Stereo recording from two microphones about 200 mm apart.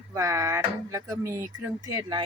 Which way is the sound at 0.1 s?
15° right (ahead or behind).